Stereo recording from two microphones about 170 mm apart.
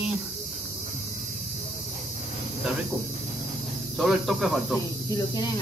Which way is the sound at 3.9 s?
5° right (ahead or behind).